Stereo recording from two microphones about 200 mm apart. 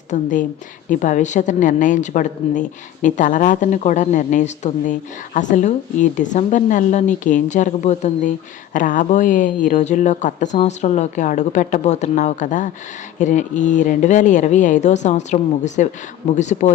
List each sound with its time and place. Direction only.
0.1 s a woman's voice: 40° left (ahead or behind)